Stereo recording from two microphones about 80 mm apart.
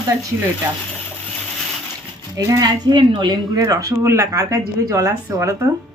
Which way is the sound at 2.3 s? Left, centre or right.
Right.